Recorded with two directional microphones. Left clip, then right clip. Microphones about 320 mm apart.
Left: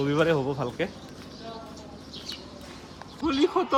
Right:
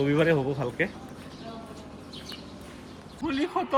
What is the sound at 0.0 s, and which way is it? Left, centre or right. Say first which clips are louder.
Speech: even; centre.